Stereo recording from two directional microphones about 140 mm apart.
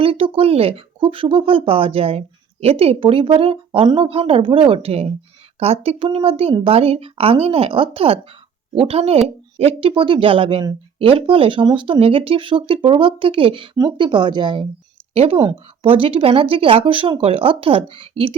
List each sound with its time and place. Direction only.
0.0 s speech: 40° right (ahead or behind)